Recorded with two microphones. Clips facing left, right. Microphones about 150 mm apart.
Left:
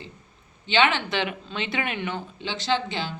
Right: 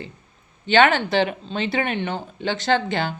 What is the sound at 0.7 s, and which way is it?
A woman's voice, 45° right (ahead or behind).